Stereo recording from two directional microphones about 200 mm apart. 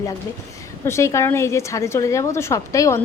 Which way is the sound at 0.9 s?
15° left (ahead or behind).